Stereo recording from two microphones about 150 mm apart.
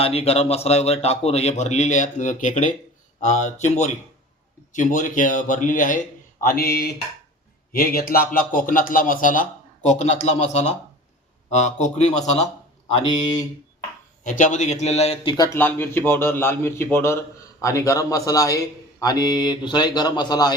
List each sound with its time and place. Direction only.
0.0 s a man's voice: 40° left (ahead or behind); by 6.0 s 60° left (ahead or behind)
6.4 s speech: 85° left
7.7 s a man's voice: 75° left (ahead or behind); by 12.2 s 50° left (ahead or behind)
14.3 s a man's voice: 60° left (ahead or behind); by 15.4 s 35° left (ahead or behind)
15.5 s a man's voice: 15° left (ahead or behind)